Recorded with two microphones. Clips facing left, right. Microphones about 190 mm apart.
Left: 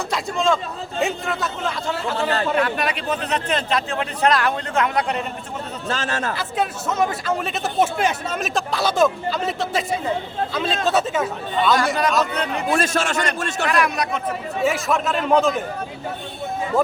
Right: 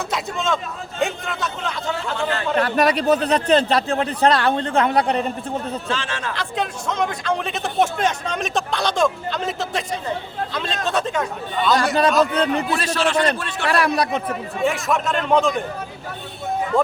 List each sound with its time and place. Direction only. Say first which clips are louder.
0.1 s a man's voice: left 4 dB; centre (ahead or behind)
2.6 s a man's voice: right 4 dB; 40° right (ahead or behind)
5.9 s speech: left 6 dB; 40° left (ahead or behind)
6.3 s a man's voice: left 1 dB; 5° left (ahead or behind)
12.2 s a man's voice: right 5 dB; 30° right (ahead or behind)
12.7 s a man's voice: right 1 dB; 50° left (ahead or behind)
13.7 s a man's voice: right 3 dB; 35° right (ahead or behind)
14.6 s a man's voice: even; centre (ahead or behind)